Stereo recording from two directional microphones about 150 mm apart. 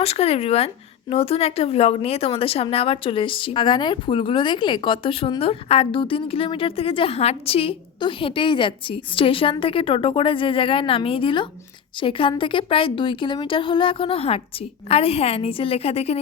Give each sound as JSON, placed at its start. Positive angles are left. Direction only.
{"t": 0.0, "sound": "a woman's voice", "side_deg": 40}